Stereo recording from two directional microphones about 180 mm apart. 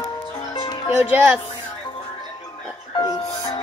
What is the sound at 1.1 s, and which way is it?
Speech, 10° right (ahead or behind).